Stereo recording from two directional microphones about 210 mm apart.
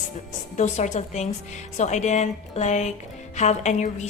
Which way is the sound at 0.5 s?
35° left (ahead or behind).